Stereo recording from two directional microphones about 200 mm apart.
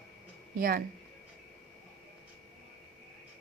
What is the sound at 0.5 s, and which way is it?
Speech, 45° right (ahead or behind).